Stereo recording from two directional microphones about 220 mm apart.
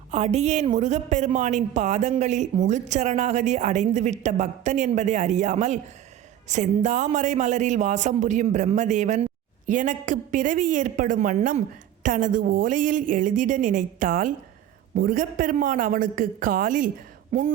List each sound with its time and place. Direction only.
0.1 s a woman's voice: 30° right (ahead or behind)